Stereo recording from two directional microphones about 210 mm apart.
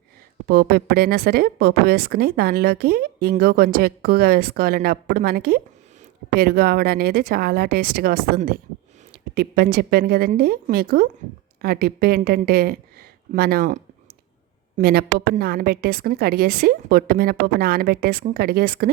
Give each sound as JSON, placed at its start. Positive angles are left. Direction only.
{"t": 0.4, "sound": "speech", "side_deg": -45}
{"t": 14.8, "sound": "speech", "side_deg": -45}